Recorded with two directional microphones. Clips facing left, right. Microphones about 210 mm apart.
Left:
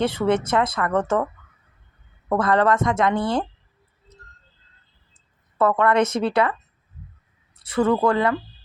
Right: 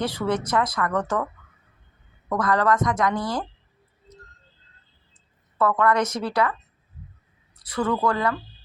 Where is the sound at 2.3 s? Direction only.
25° left (ahead or behind).